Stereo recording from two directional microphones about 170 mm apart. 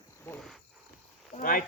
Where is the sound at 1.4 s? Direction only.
55° left (ahead or behind).